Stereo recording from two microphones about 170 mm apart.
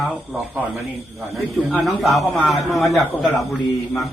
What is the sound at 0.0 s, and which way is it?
Speech, 5° right (ahead or behind).